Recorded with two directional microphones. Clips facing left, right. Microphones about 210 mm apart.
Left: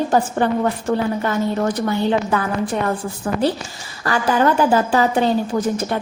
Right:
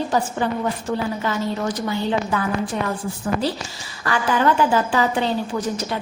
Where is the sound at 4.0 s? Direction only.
40° left (ahead or behind).